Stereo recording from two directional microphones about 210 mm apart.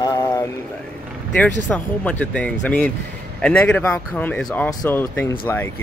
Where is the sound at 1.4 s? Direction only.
5° left (ahead or behind).